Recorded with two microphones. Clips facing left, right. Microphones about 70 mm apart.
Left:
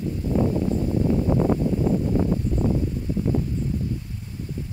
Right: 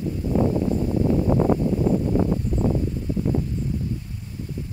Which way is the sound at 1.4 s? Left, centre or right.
Centre.